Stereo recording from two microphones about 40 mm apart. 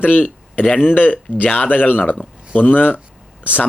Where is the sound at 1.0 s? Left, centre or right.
Left.